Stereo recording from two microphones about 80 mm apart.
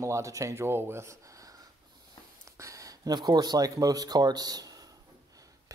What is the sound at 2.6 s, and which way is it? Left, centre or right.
Speech, right.